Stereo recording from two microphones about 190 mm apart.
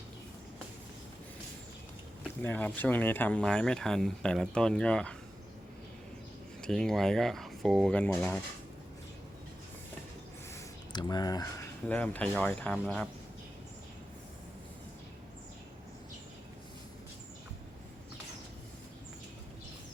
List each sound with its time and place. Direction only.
2.4 s speech: 10° left (ahead or behind)
6.6 s speech: centre (ahead or behind)
10.5 s a sound: 20° left (ahead or behind)
11.9 s speech: 5° left (ahead or behind)